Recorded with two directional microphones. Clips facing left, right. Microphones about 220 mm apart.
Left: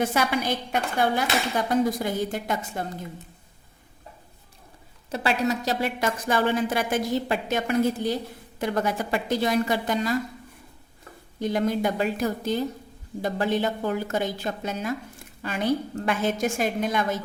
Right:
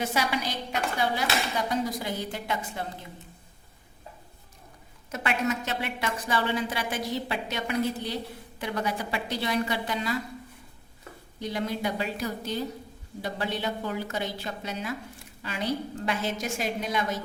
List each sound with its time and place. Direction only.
0.0 s a woman's voice: 50° left (ahead or behind)
5.1 s a woman's voice: 35° left (ahead or behind)
11.3 s a woman's voice: 50° left (ahead or behind)